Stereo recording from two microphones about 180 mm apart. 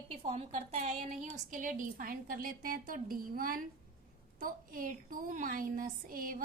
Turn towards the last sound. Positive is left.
turn(degrees=-50)  # may be behind; listen again after turning